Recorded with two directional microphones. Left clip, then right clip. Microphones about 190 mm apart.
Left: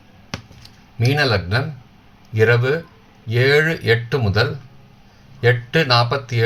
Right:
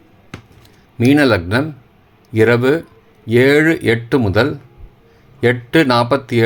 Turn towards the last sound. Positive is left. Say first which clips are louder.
# right 4 dB
turn(degrees=-45)  # may be behind; listen again after turning